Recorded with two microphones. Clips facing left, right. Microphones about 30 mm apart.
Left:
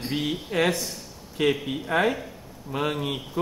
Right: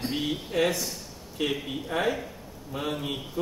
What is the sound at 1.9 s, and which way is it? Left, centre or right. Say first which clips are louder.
Speech: left 6 dB; left.